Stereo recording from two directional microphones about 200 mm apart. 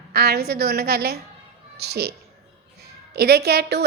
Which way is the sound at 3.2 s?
50° right (ahead or behind).